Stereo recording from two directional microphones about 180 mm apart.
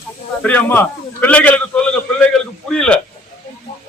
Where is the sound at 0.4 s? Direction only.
10° left (ahead or behind).